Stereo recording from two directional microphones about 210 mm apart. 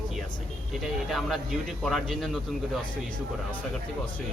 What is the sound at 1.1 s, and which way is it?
Speech, centre (ahead or behind).